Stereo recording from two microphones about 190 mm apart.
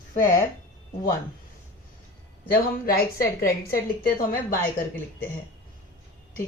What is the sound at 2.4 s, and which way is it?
Speech, 50° left (ahead or behind).